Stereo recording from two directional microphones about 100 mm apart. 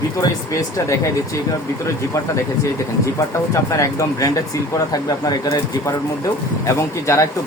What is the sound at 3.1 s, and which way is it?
Speech, 35° left (ahead or behind).